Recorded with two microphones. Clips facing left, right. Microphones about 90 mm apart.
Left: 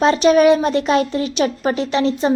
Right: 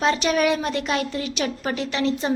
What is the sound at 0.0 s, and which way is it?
A woman's voice, 30° left (ahead or behind).